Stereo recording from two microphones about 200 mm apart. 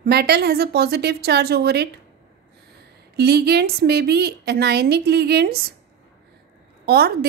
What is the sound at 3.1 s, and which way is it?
A woman's voice, 55° right (ahead or behind).